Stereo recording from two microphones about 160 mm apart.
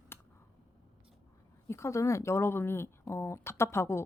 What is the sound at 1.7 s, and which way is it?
Speech, 15° left (ahead or behind).